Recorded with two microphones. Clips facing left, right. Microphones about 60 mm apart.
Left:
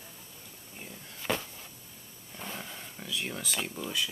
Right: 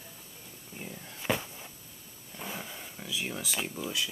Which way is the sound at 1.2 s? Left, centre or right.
Centre.